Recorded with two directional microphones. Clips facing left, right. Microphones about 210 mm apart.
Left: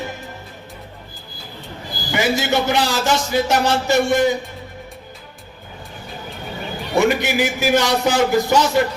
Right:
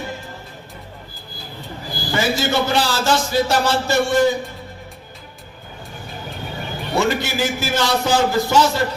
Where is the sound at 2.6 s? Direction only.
20° left (ahead or behind).